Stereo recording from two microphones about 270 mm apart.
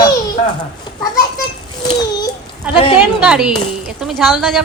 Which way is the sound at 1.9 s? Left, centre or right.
Centre.